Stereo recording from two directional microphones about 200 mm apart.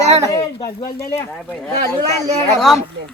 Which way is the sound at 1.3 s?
Centre (ahead or behind).